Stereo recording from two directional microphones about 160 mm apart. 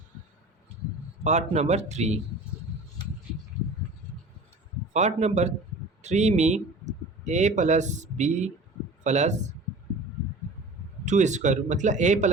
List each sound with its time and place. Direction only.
1.2 s speech: 45° right (ahead or behind)
4.9 s a man's voice: 45° right (ahead or behind)
11.0 s speech: 50° right (ahead or behind)